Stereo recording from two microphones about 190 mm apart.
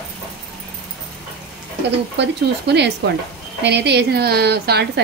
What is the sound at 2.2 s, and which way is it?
A woman's voice, 60° right (ahead or behind).